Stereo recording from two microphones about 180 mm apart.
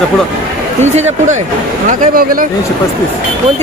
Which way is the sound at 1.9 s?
50° right (ahead or behind).